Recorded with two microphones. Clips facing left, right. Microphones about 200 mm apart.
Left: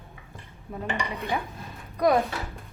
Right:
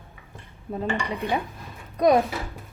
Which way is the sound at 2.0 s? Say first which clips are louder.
Right 3 dB; 20° right (ahead or behind).